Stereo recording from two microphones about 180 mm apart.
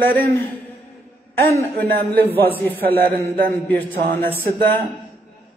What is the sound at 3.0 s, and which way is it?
Speech, 50° right (ahead or behind).